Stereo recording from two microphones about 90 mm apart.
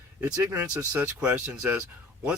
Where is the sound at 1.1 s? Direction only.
15° right (ahead or behind).